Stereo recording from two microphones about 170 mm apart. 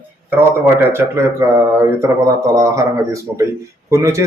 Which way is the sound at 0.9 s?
15° right (ahead or behind).